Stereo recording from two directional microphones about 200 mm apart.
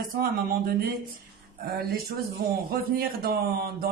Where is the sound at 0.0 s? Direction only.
45° right (ahead or behind).